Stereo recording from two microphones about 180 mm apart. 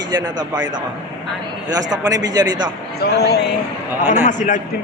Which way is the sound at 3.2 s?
65° left (ahead or behind).